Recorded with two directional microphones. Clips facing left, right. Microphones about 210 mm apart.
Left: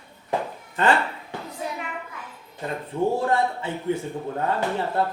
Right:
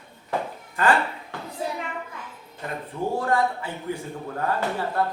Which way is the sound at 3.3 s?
25° left (ahead or behind).